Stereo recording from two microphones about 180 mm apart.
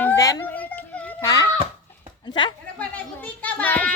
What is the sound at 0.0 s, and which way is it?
Children playing, 15° left (ahead or behind).